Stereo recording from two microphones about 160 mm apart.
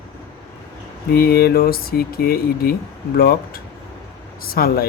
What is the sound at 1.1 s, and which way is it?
Speech, 75° left (ahead or behind).